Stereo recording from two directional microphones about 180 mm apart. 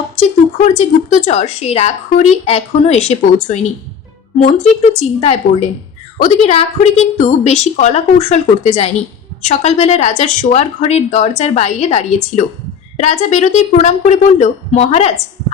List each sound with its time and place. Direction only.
0.2 s a woman's voice: 40° left (ahead or behind)